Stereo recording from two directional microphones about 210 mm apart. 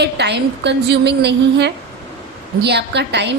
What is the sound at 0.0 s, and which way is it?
A woman's voice, 55° right (ahead or behind).